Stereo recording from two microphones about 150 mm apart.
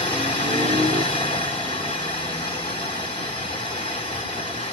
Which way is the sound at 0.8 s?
35° left (ahead or behind).